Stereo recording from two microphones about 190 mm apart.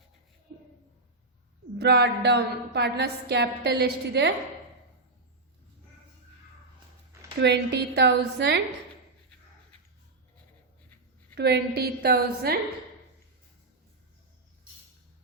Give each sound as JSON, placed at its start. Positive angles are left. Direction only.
{"t": 1.8, "sound": "a woman's voice", "side_deg": -60}
{"t": 7.3, "sound": "a woman's voice", "side_deg": -65}
{"t": 11.3, "sound": "a woman's voice", "side_deg": -60}